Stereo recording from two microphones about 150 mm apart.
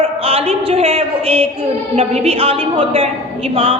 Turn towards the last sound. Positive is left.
turn(degrees=-40)  # may be behind; listen again after turning